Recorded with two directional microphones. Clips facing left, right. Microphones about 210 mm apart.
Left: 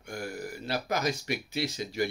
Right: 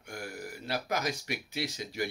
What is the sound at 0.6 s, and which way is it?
Speech, 10° right (ahead or behind).